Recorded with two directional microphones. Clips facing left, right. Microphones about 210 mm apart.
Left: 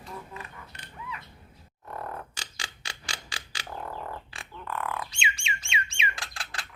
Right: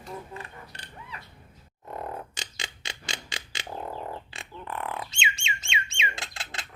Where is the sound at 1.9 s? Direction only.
20° right (ahead or behind).